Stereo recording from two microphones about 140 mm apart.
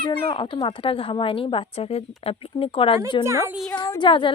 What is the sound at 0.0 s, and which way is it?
Speech, 35° left (ahead or behind).